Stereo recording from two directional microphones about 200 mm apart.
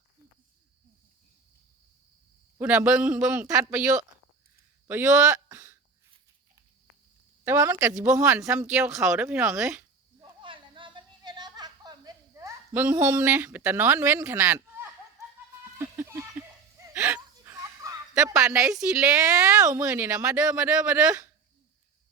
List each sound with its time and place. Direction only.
2.6 s a man's voice: 5° right (ahead or behind)
7.4 s a man's voice: 10° right (ahead or behind)
10.2 s a sound: 25° right (ahead or behind); by 14.8 s 10° right (ahead or behind)
15.2 s music: 15° right (ahead or behind)
15.8 s a sound: 15° right (ahead or behind)
16.7 s dog: 10° right (ahead or behind)
17.2 s a sound: 15° right (ahead or behind)
18.2 s a man's voice: 5° right (ahead or behind)
19.5 s a man's voice: 15° right (ahead or behind)